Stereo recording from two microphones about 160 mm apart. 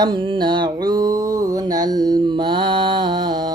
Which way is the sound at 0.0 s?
30° right (ahead or behind).